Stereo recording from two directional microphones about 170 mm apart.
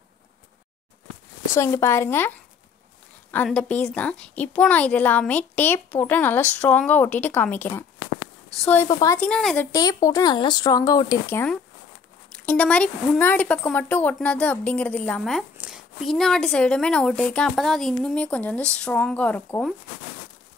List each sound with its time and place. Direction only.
1.6 s a woman's voice: 15° left (ahead or behind)
3.4 s a woman's voice: 5° left (ahead or behind)
8.8 s a woman's voice: 15° left (ahead or behind)
9.3 s speech: 5° left (ahead or behind)
9.7 s a woman's voice: 20° left (ahead or behind); by 15.4 s 5° left (ahead or behind)
15.5 s speech: 5° right (ahead or behind)